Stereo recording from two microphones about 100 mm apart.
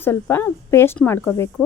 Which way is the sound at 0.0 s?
20° left (ahead or behind).